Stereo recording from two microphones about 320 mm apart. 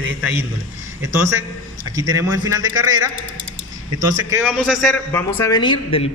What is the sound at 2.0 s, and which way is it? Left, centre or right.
A man's voice, centre.